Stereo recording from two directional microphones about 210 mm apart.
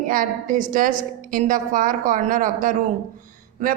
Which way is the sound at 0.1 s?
40° right (ahead or behind).